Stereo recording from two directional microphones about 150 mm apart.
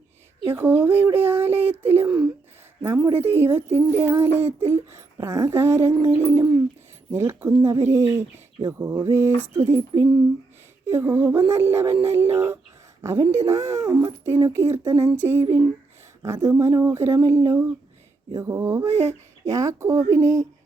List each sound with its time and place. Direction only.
0.4 s speech: 15° right (ahead or behind)